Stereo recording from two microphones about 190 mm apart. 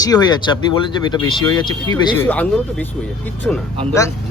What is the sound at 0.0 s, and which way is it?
Speech, 20° left (ahead or behind).